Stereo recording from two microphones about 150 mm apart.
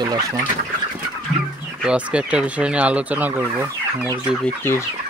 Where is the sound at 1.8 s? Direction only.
5° right (ahead or behind).